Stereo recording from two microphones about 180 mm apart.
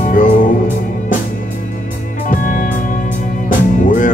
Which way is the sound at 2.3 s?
50° left (ahead or behind).